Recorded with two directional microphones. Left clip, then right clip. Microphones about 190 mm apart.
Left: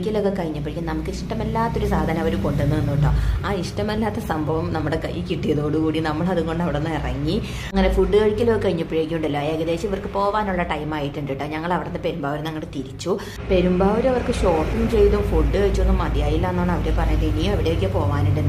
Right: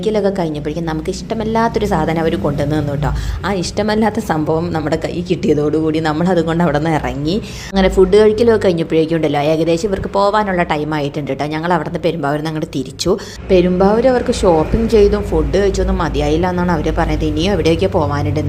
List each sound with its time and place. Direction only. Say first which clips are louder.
0.0 s a woman's voice: right 7 dB; 30° right (ahead or behind)
1.5 s a woman's voice: right 8 dB; 30° right (ahead or behind)